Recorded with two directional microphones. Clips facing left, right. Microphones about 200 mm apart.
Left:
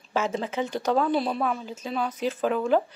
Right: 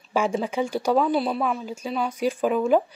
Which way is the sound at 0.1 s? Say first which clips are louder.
Right 3 dB; 10° right (ahead or behind).